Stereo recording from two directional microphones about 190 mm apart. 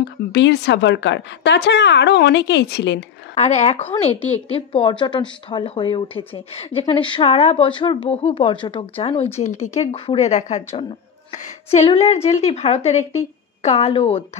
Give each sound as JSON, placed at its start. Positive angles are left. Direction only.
{"t": 0.0, "sound": "a woman's voice", "side_deg": 65}
{"t": 3.3, "sound": "a woman's voice", "side_deg": 35}